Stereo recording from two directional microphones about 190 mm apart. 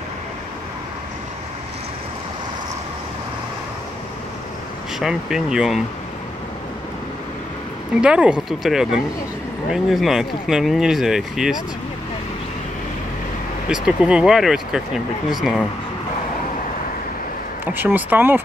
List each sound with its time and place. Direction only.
4.9 s speech: 5° right (ahead or behind)
8.0 s speech: 5° right (ahead or behind)
13.7 s speech: 5° right (ahead or behind)
17.6 s speech: 10° right (ahead or behind)